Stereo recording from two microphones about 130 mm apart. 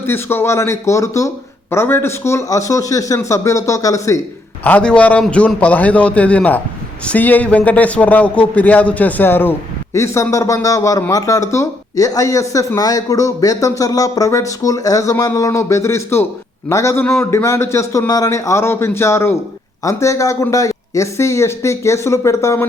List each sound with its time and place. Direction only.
0.0 s speech: 20° left (ahead or behind)
4.6 s a man's voice: 10° left (ahead or behind)